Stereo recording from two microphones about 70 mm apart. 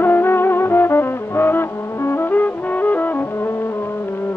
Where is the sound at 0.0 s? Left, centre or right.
Left.